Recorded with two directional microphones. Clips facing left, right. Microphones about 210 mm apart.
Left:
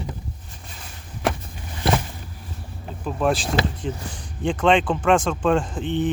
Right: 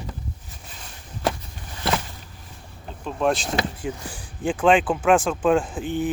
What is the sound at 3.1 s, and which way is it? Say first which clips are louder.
Speech: left 1 dB; centre (ahead or behind).